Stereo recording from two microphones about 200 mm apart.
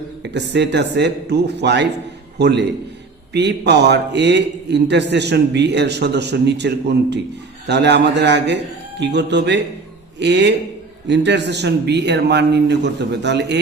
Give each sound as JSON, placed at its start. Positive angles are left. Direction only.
{"t": 0.2, "sound": "a man's voice", "side_deg": -60}